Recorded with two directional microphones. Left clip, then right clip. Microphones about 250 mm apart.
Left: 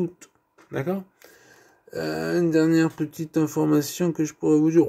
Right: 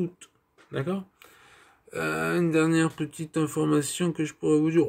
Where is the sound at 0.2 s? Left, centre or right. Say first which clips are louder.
Left 2 dB; centre.